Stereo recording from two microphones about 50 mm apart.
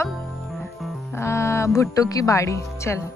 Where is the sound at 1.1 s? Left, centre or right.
Left.